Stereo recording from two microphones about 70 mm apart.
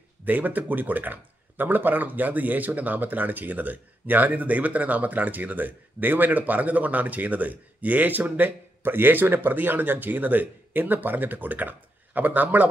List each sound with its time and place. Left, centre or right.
0.2 s speech: right